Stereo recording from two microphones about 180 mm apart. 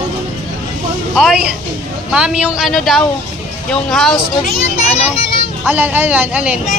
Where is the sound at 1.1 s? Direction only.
5° right (ahead or behind).